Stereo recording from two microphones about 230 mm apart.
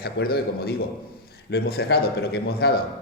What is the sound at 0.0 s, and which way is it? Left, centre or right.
A man's voice, left.